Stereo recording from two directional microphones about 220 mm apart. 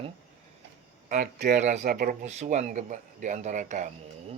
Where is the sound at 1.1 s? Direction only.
40° right (ahead or behind).